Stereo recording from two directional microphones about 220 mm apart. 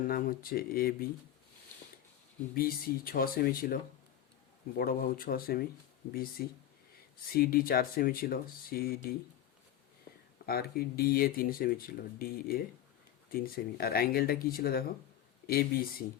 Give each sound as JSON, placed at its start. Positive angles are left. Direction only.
{"t": 0.0, "sound": "speech", "side_deg": 40}
{"t": 2.6, "sound": "speech", "side_deg": 40}
{"t": 4.8, "sound": "speech", "side_deg": 40}
{"t": 10.3, "sound": "speech", "side_deg": 45}